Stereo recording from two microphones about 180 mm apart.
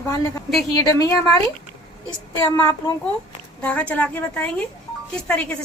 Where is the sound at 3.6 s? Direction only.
5° left (ahead or behind).